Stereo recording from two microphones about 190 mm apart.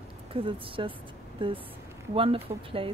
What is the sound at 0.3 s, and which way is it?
Speech, 30° right (ahead or behind).